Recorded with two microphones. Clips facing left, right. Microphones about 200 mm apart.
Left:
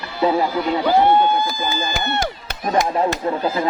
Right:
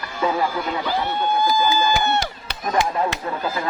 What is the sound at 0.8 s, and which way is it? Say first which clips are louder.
Speech: left 12 dB; 50° left (ahead or behind).